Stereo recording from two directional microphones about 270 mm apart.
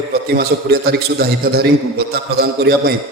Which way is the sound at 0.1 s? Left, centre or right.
Right.